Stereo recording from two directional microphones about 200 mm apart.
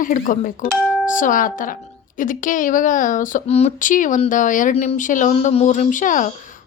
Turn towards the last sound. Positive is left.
turn(degrees=40)  # may be behind; listen again after turning